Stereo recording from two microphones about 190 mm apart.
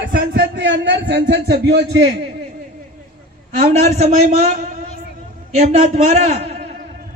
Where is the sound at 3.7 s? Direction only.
35° right (ahead or behind).